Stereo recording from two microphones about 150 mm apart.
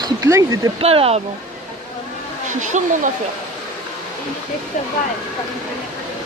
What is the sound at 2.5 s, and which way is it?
Speech, 55° right (ahead or behind).